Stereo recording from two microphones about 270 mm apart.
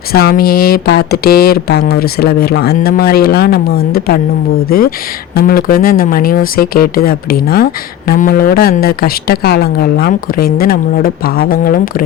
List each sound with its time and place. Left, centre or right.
0.1 s speech: left
5.3 s speech: left